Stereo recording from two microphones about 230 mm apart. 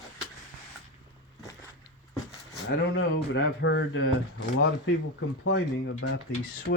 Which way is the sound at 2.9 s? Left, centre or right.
Left.